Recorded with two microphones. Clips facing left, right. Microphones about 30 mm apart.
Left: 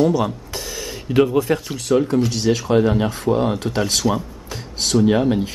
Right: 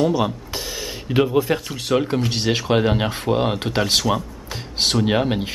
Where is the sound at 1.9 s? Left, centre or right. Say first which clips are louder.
Left 3 dB; right.